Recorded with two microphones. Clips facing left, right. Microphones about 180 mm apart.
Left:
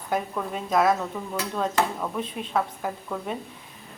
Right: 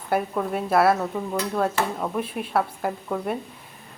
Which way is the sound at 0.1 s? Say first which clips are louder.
Right 4 dB; 10° right (ahead or behind).